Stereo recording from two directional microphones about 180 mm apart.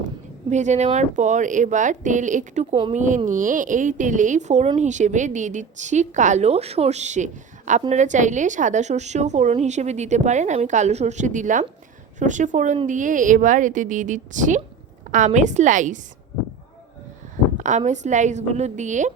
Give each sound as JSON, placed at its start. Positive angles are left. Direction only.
{"t": 0.5, "sound": "a woman's voice", "side_deg": -40}
{"t": 17.6, "sound": "a woman's voice", "side_deg": -40}